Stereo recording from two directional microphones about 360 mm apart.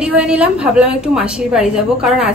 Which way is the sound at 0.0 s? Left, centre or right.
Centre.